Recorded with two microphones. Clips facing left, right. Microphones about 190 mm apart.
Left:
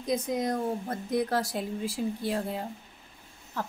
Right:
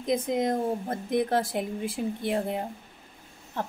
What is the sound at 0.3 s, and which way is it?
A woman's voice, 25° right (ahead or behind).